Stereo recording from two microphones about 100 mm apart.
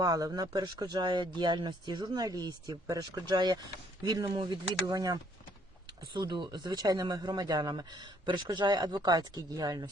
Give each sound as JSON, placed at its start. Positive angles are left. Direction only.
{"t": 0.0, "sound": "speech", "side_deg": -35}